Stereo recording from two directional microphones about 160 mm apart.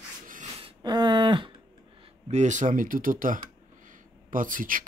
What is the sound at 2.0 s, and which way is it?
Speech, 45° right (ahead or behind).